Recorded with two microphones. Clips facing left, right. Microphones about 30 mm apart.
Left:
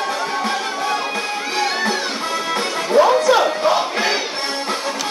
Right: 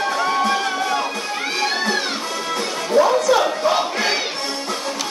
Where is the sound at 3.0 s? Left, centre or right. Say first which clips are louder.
Left 2 dB; left.